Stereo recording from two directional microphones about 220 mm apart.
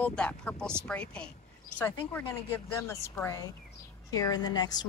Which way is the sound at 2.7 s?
10° left (ahead or behind).